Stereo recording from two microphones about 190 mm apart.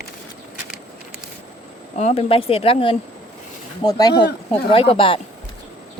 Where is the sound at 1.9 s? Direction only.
35° left (ahead or behind).